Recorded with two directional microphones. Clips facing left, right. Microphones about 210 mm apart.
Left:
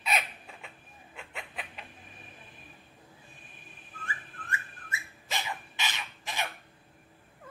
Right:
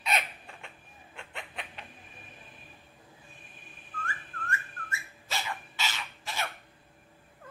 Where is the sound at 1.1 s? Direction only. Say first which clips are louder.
Even; centre (ahead or behind).